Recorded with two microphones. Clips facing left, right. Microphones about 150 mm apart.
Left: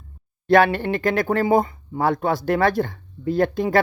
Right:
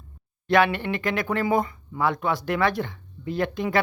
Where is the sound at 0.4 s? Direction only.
35° left (ahead or behind).